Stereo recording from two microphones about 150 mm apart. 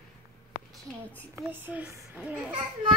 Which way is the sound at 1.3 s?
10° right (ahead or behind).